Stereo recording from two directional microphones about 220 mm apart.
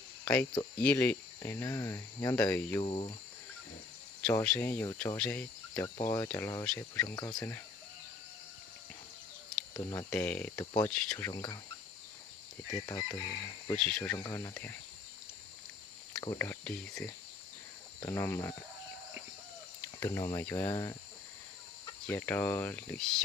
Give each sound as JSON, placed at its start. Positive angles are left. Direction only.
{"t": 0.8, "sound": "speech", "side_deg": 5}
{"t": 2.8, "sound": "speech", "side_deg": 25}
{"t": 4.2, "sound": "speech", "side_deg": 5}
{"t": 9.7, "sound": "speech", "side_deg": 15}
{"t": 10.1, "sound": "speech", "side_deg": 5}
{"t": 10.9, "sound": "speech", "side_deg": 5}
{"t": 11.3, "sound": "speech", "side_deg": 20}
{"t": 12.8, "sound": "speech", "side_deg": 15}
{"t": 13.7, "sound": "speech", "side_deg": 5}
{"t": 16.1, "sound": "speech", "side_deg": 20}
{"t": 19.8, "sound": "cricket", "side_deg": 10}
{"t": 20.3, "sound": "speech", "side_deg": 10}
{"t": 22.0, "sound": "speech", "side_deg": 10}